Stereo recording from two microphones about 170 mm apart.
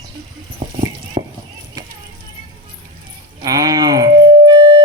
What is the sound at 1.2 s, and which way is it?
Clip-clop, 30° right (ahead or behind).